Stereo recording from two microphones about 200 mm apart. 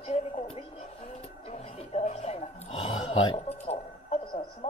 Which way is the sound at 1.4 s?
35° left (ahead or behind).